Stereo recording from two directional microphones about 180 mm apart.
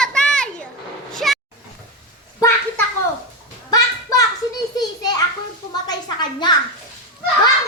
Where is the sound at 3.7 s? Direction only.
20° left (ahead or behind).